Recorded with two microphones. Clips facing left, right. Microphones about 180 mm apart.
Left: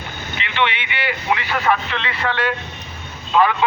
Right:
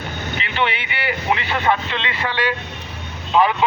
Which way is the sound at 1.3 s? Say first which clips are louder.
Even; 25° right (ahead or behind).